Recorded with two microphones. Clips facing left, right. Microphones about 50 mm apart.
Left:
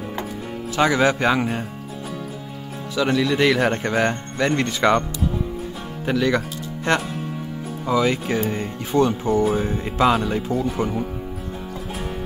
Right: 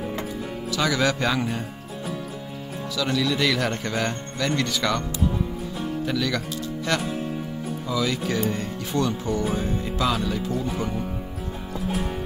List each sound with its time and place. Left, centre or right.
0.7 s a man's voice: left
3.0 s a man's voice: left
6.0 s a man's voice: left